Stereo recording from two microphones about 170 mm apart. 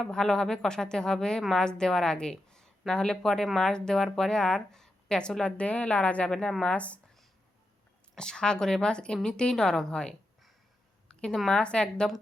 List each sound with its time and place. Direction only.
0.0 s a woman's voice: 5° left (ahead or behind)